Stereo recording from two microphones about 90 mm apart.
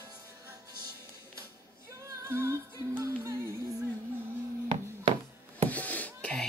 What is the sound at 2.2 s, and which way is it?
Music, 30° right (ahead or behind).